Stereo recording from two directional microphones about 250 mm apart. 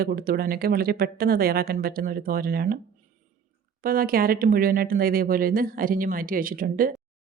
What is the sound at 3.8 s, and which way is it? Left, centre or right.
Speech, right.